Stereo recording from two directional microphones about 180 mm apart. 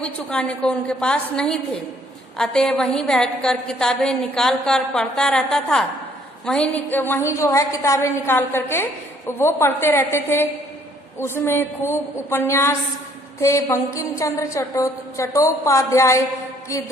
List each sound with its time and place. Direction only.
0.0 s a woman's voice: 5° left (ahead or behind)